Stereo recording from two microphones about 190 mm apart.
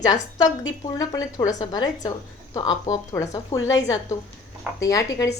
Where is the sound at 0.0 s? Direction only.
20° left (ahead or behind).